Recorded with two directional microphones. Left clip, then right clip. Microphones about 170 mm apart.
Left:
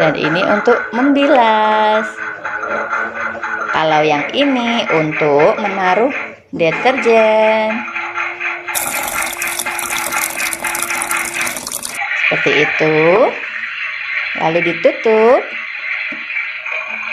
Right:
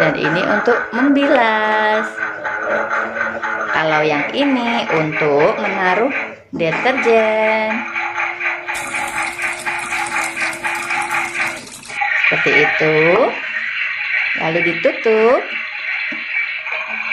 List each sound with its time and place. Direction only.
0.0 s speech: 20° left (ahead or behind)
3.7 s speech: 25° left (ahead or behind)
12.3 s speech: 30° left (ahead or behind)
14.4 s speech: 25° left (ahead or behind)